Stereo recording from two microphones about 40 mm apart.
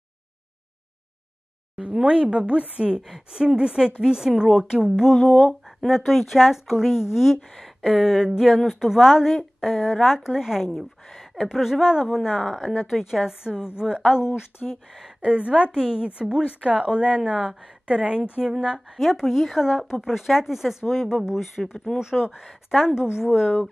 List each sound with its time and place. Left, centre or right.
1.8 s a woman's voice: right
3.0 s a woman's voice: centre
5.1 s a woman's voice: centre
15.2 s a woman's voice: right
18.9 s speech: centre
23.0 s a woman's voice: left